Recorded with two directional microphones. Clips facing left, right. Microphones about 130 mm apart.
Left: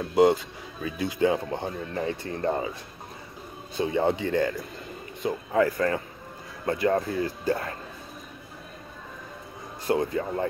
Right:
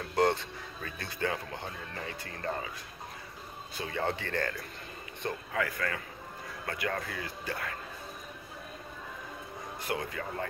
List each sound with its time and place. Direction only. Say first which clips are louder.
0.0 s a sound: left 8 dB; 15° left (ahead or behind)
0.8 s speech: left 11 dB; 10° left (ahead or behind)
1.5 s speech: left 10 dB; 30° left (ahead or behind)
3.7 s speech: left 9 dB; 20° left (ahead or behind)
5.5 s speech: left 12 dB; 30° left (ahead or behind)
9.8 s speech: left 11 dB; 30° left (ahead or behind)